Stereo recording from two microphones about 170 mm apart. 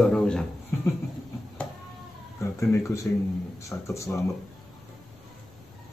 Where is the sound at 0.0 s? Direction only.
5° left (ahead or behind).